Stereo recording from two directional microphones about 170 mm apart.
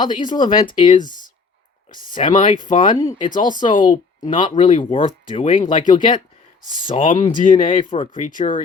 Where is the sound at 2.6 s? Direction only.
50° left (ahead or behind).